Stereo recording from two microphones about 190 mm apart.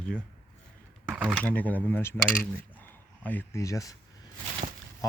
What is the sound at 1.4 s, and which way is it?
Speech, 10° left (ahead or behind).